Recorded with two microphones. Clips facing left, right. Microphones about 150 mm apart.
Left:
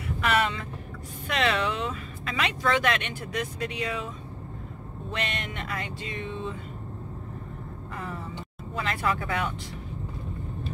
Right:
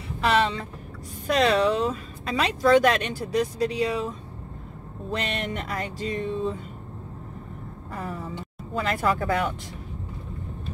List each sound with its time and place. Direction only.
0.2 s vehicle: 30° right (ahead or behind)
1.2 s speech: 40° right (ahead or behind)
5.1 s speech: 35° right (ahead or behind)
7.9 s a sound: 35° right (ahead or behind)
8.7 s speech: 40° right (ahead or behind)